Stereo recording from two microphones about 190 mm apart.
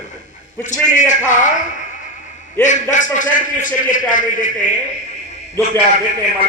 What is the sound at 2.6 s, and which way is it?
A man's voice, 40° left (ahead or behind).